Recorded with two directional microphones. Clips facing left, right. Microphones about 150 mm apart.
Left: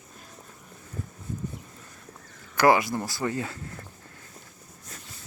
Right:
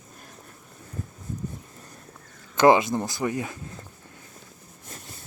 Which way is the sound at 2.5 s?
20° right (ahead or behind).